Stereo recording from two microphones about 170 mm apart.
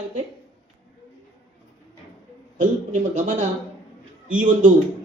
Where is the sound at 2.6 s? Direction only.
50° right (ahead or behind).